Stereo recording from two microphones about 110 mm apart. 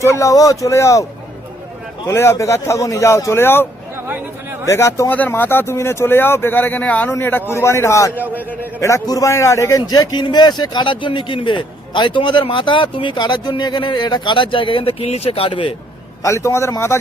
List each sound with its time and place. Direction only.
0.0 s speech: 25° left (ahead or behind)
2.1 s speech: 25° left (ahead or behind)
5.1 s speech: 15° left (ahead or behind)
8.1 s a man's voice: 15° right (ahead or behind)
8.8 s a man's voice: 30° left (ahead or behind); by 15.7 s 55° left (ahead or behind)
16.2 s speech: 30° left (ahead or behind)